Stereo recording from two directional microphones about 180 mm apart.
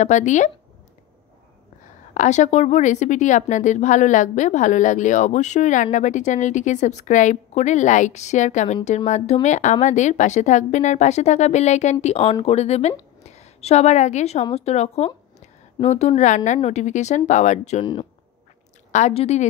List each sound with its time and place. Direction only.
0.0 s a woman's voice: 40° left (ahead or behind)
2.1 s a woman's voice: 40° left (ahead or behind)
18.9 s a woman's voice: 40° left (ahead or behind)